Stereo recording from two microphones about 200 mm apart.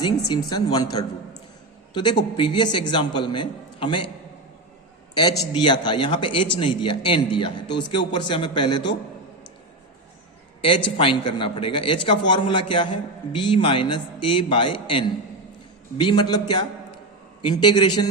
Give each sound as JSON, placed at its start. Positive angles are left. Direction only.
{"t": 0.3, "sound": "a man's voice", "side_deg": 20}
{"t": 5.5, "sound": "a man's voice", "side_deg": 20}
{"t": 10.6, "sound": "a man's voice", "side_deg": 25}